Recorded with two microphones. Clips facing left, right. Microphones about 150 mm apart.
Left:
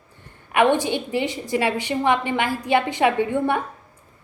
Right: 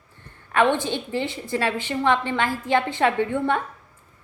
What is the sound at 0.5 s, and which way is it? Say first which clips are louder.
A woman's voice: left 2 dB; 15° left (ahead or behind).